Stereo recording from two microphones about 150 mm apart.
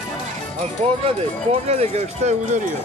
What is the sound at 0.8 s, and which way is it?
Speech, 50° right (ahead or behind).